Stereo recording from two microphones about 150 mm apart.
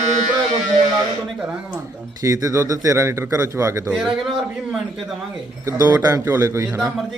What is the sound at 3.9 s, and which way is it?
A man's voice, 5° right (ahead or behind).